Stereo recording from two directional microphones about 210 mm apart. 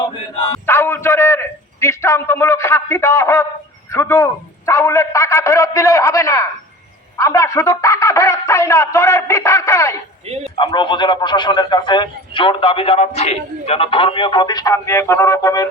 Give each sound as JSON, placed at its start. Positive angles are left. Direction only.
{"t": 0.7, "sound": "a man's voice", "side_deg": 10}
{"t": 10.2, "sound": "a man's voice", "side_deg": -30}
{"t": 10.5, "sound": "speech", "side_deg": 25}